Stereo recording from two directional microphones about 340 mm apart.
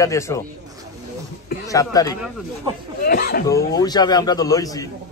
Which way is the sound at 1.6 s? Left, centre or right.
Centre.